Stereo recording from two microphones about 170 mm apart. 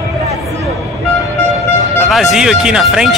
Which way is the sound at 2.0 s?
Centre (ahead or behind).